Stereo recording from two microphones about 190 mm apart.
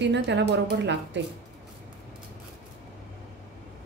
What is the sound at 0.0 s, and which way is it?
A woman's voice, 65° right (ahead or behind).